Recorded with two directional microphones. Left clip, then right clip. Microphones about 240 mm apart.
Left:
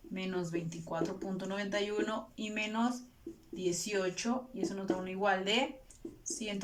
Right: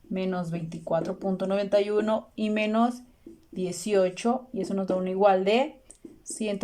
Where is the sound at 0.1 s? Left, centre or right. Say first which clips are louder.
Right 7 dB; right.